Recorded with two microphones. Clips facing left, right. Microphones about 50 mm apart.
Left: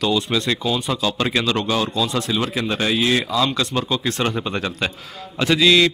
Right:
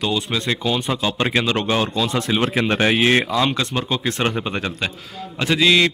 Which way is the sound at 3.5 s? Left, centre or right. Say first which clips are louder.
Left 1 dB; right.